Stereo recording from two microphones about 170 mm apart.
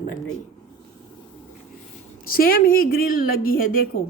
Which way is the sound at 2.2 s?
60° left (ahead or behind).